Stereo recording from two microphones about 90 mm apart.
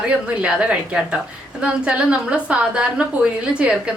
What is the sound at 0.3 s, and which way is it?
A woman's voice, 10° right (ahead or behind).